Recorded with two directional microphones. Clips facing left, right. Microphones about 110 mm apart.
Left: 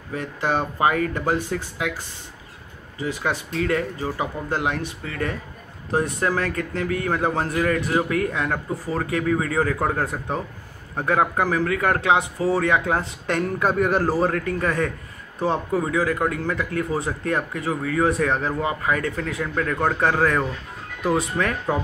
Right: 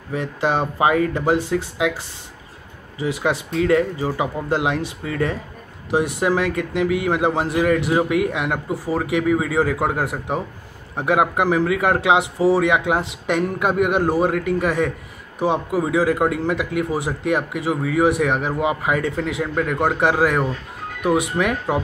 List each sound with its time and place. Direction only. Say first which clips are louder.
0.1 s speech: right 3 dB; 20° right (ahead or behind)